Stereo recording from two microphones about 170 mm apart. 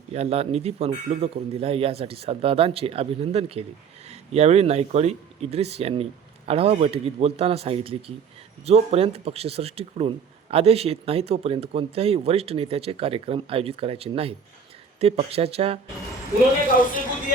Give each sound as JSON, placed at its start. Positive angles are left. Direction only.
{"t": 0.1, "sound": "speech", "side_deg": -40}